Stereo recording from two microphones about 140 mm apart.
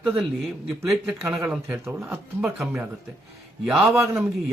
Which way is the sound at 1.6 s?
20° right (ahead or behind).